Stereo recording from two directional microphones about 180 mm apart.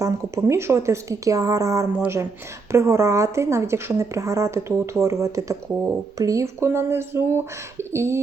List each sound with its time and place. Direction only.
0.0 s speech: 15° right (ahead or behind)